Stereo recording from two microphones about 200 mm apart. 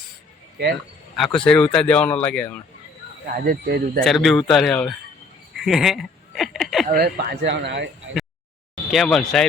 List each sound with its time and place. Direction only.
1.1 s speech: centre (ahead or behind)
3.4 s speech: 50° right (ahead or behind)
4.0 s speech: centre (ahead or behind)
5.5 s a sound: centre (ahead or behind)
6.9 s speech: 50° right (ahead or behind)
8.9 s speech: centre (ahead or behind)